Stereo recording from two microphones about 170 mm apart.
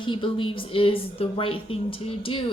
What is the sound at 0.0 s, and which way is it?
A woman's voice, 30° left (ahead or behind).